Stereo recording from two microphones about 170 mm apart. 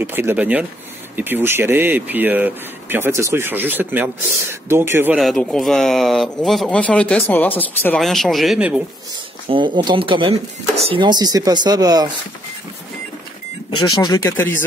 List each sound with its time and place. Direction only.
0.0 s speech: 15° right (ahead or behind)
5.1 s speech: centre (ahead or behind)
9.5 s speech: 30° right (ahead or behind)
13.7 s speech: 25° left (ahead or behind)